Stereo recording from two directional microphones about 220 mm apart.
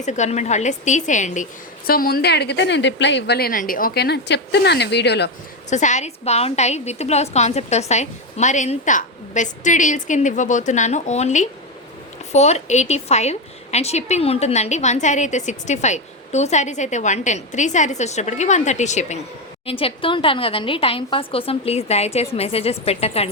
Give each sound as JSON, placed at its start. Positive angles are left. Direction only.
{"t": 0.0, "sound": "a woman's voice", "side_deg": 30}
{"t": 5.7, "sound": "a woman's voice", "side_deg": 35}